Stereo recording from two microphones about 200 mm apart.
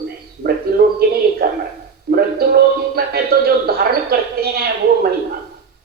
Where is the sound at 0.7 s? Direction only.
45° right (ahead or behind).